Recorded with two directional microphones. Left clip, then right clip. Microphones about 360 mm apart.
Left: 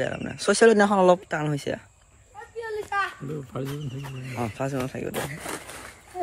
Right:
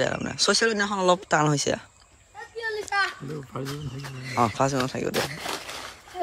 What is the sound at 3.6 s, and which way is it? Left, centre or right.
Speech, right.